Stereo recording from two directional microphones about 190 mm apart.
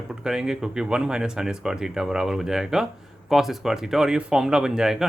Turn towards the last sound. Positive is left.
turn(degrees=0)  # may be behind; listen again after turning